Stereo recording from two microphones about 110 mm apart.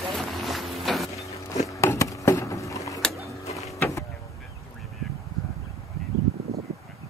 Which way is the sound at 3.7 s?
25° left (ahead or behind).